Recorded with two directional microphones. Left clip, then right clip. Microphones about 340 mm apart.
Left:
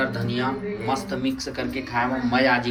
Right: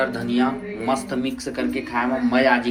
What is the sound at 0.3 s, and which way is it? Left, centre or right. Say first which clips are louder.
Speech: right 3 dB; centre.